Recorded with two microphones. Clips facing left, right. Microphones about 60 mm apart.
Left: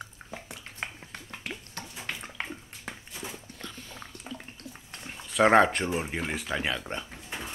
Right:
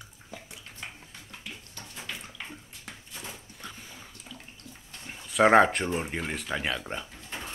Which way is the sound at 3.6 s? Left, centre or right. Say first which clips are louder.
Left 1 dB; centre.